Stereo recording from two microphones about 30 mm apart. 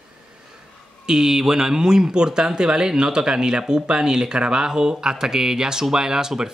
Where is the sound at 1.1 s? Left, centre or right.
Centre.